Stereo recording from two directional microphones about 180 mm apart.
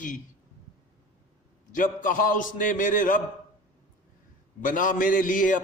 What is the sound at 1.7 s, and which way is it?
A man's voice, 50° left (ahead or behind).